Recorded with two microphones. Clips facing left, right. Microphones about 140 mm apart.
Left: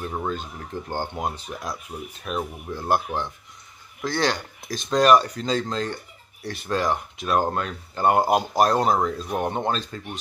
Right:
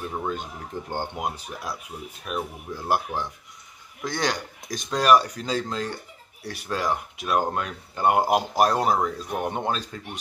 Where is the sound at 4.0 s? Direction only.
15° right (ahead or behind).